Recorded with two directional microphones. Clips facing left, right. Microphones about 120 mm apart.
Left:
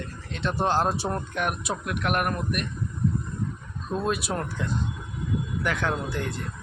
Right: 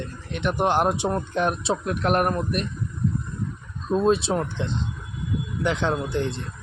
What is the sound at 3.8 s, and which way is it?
Speech, 25° right (ahead or behind).